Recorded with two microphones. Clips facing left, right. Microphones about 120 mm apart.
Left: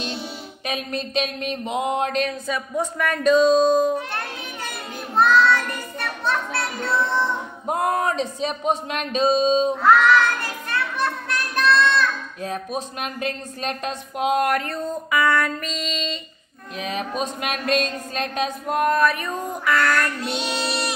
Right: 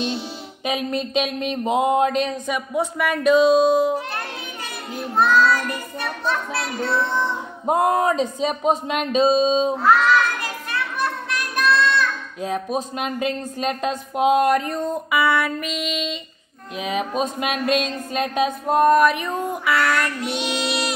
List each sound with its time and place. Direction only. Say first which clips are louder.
0.7 s speech: right 4 dB; 20° right (ahead or behind)
4.6 s child singing: right 5 dB; centre (ahead or behind)
7.6 s speech: right 4 dB; 20° right (ahead or behind)
10.0 s child singing: left 1 dB; centre (ahead or behind)
12.4 s speech: right 7 dB; 20° right (ahead or behind)
19.7 s child singing: left 1 dB; 5° right (ahead or behind)
20.3 s speech: right 2 dB; 15° right (ahead or behind)
20.6 s child singing: right 2 dB; centre (ahead or behind)